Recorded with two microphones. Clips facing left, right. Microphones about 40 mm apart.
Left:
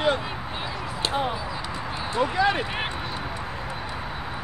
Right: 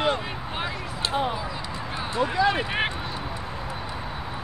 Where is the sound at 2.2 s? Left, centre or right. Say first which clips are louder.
Even; left.